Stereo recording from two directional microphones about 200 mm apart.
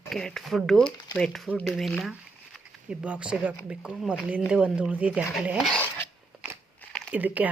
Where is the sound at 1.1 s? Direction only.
Centre (ahead or behind).